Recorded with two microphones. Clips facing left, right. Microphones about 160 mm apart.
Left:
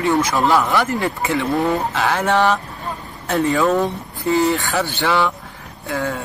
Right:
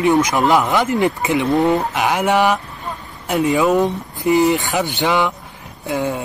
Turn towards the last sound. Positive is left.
turn(degrees=-20)  # may be behind; listen again after turning